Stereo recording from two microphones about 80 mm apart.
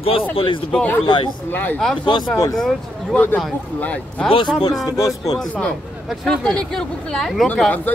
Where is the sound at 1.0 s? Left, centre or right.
Left.